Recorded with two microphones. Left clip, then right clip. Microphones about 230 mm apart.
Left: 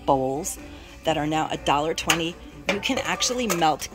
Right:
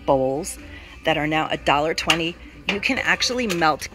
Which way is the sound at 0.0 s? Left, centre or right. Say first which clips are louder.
Right 3 dB; centre.